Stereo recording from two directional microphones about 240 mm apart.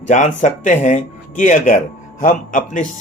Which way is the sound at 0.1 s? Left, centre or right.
Left.